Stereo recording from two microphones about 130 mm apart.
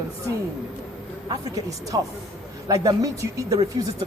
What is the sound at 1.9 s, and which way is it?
Speech, 30° right (ahead or behind).